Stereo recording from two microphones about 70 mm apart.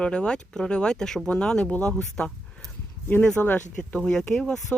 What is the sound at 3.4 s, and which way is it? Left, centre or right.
Speech, left.